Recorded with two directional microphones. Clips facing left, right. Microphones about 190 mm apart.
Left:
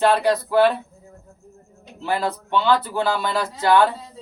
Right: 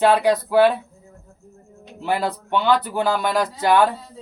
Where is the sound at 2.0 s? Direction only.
15° right (ahead or behind).